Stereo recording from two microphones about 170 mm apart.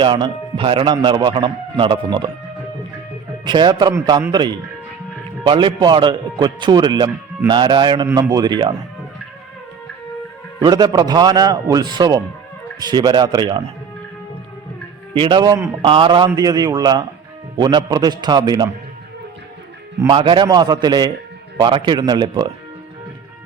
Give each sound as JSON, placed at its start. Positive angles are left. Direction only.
{"t": 0.0, "sound": "speech", "side_deg": -30}
{"t": 3.4, "sound": "speech", "side_deg": -25}
{"t": 10.6, "sound": "speech", "side_deg": -25}
{"t": 15.2, "sound": "speech", "side_deg": -25}
{"t": 15.8, "sound": "speech", "side_deg": -30}
{"t": 20.0, "sound": "speech", "side_deg": -30}